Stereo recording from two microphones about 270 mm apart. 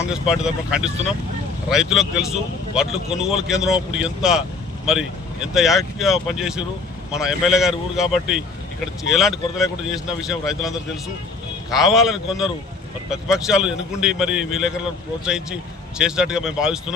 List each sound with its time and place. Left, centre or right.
0.1 s speech: centre